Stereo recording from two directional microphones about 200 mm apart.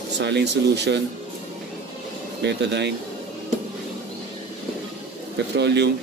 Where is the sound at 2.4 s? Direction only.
60° right (ahead or behind).